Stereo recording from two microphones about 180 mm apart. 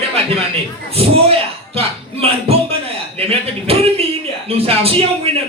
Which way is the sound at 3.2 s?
35° right (ahead or behind).